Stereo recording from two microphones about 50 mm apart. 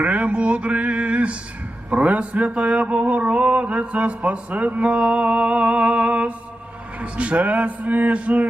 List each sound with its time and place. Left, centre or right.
0.0 s a sound: right
1.9 s mantra: right
7.0 s a man's voice: right